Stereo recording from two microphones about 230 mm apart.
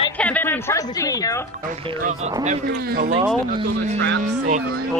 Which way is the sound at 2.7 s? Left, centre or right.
Right.